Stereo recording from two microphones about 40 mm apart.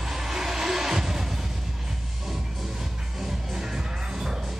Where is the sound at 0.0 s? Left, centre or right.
Centre.